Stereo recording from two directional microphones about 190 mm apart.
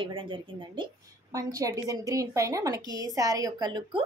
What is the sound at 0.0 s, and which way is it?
A woman's voice, 25° right (ahead or behind).